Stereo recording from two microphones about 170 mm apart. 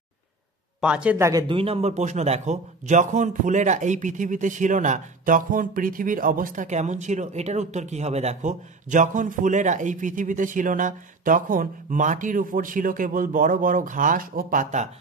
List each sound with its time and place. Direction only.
0.7 s a man's voice: 5° right (ahead or behind)
1.1 s speech: 15° right (ahead or behind)
1.5 s a man's voice: 35° right (ahead or behind)